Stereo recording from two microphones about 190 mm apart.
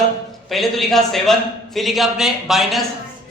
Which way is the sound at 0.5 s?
Centre (ahead or behind).